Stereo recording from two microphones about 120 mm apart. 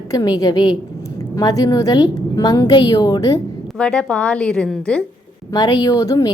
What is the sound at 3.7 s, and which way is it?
A woman's voice, 10° left (ahead or behind).